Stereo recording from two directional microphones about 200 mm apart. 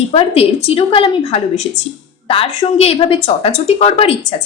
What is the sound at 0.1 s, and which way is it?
A woman's voice, 30° left (ahead or behind).